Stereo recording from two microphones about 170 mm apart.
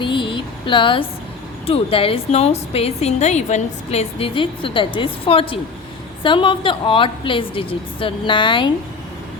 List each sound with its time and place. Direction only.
0.0 s vehicle: 30° left (ahead or behind)
1.6 s a woman's voice: 35° left (ahead or behind)